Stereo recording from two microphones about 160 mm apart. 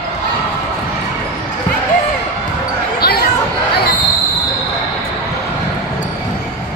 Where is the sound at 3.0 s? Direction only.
80° left.